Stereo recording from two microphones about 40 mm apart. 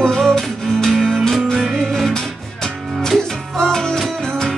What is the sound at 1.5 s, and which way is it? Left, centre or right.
Music, centre.